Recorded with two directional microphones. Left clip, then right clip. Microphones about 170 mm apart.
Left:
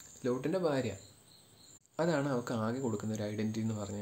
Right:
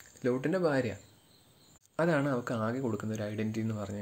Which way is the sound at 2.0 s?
15° right (ahead or behind).